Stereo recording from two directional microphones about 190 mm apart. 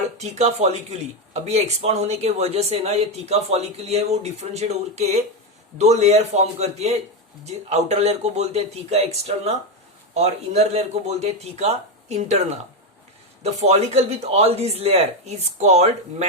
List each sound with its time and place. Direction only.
0.2 s speech: 35° right (ahead or behind)